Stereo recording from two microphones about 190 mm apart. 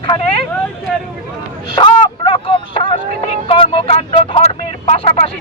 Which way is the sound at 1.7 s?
25° left (ahead or behind).